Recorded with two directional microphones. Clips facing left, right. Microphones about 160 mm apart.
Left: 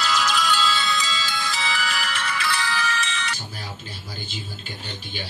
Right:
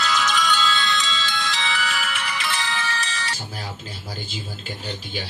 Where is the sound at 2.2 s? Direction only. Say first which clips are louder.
Left 1 dB; 20° right (ahead or behind); by 3.3 s 35° right (ahead or behind).